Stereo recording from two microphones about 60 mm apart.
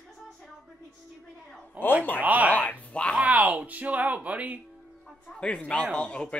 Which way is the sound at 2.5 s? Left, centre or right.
Left.